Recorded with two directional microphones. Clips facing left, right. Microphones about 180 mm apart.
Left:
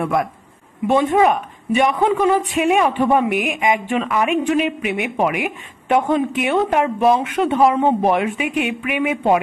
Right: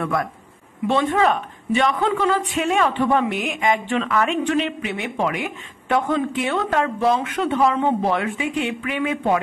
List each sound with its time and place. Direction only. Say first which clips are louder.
0.0 s speech: left 4 dB; 20° left (ahead or behind)